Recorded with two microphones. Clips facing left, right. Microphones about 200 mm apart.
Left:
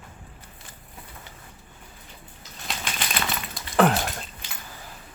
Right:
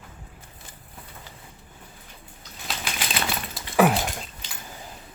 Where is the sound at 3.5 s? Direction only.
5° right (ahead or behind).